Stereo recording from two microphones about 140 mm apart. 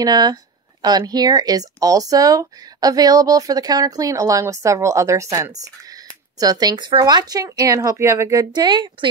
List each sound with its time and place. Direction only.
0.0 s speech: 30° right (ahead or behind)
8.5 s speech: 35° right (ahead or behind)